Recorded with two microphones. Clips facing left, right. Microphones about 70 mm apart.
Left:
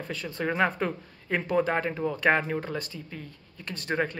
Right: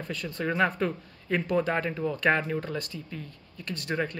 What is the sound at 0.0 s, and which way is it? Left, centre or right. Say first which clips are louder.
Speech: left 1 dB; left.